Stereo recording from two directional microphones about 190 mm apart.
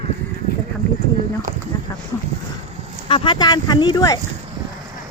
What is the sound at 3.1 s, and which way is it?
Speech, 25° left (ahead or behind).